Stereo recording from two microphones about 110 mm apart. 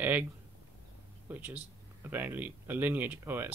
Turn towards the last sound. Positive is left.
turn(degrees=-20)  # may be behind; listen again after turning